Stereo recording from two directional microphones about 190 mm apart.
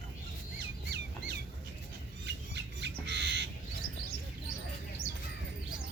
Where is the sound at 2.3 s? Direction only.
65° right (ahead or behind).